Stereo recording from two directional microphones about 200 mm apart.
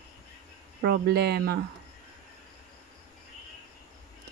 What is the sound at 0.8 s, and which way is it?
Speech, 50° right (ahead or behind).